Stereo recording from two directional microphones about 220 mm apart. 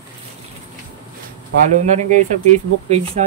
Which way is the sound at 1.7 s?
35° right (ahead or behind).